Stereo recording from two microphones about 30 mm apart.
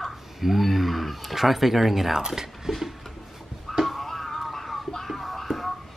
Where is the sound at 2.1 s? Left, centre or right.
Centre.